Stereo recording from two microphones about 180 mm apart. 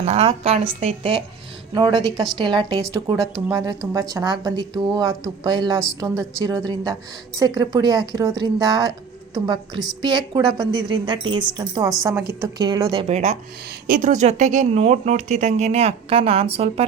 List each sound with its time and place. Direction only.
0.0 s a woman's voice: 35° right (ahead or behind)
9.7 s a woman's voice: centre (ahead or behind)
10.0 s a woman's voice: 25° right (ahead or behind)
13.8 s a woman's voice: 50° right (ahead or behind); by 16.8 s 35° right (ahead or behind)